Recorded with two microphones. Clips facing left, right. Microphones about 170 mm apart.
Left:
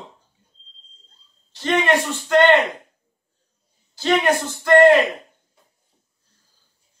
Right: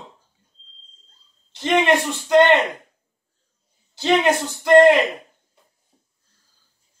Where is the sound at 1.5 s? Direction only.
20° right (ahead or behind).